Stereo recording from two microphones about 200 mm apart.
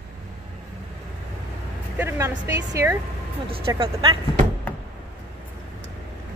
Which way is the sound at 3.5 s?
25° right (ahead or behind).